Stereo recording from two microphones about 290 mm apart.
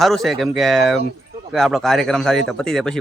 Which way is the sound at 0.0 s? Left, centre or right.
Centre.